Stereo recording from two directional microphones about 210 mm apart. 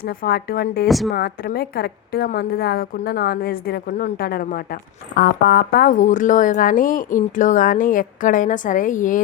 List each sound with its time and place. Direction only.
0.0 s a woman's voice: 45° left (ahead or behind)
0.9 s a woman's voice: centre (ahead or behind)
1.1 s a woman's voice: 50° left (ahead or behind)